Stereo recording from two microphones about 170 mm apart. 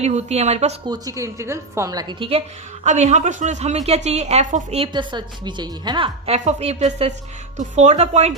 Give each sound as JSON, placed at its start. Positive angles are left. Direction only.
{"t": 0.0, "sound": "a woman's voice", "side_deg": -40}
{"t": 0.9, "sound": "a woman's voice", "side_deg": -20}
{"t": 2.8, "sound": "a woman's voice", "side_deg": -45}